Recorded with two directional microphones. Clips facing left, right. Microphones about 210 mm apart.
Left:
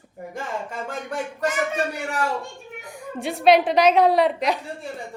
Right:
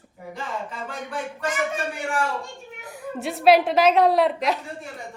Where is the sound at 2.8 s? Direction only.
Centre (ahead or behind).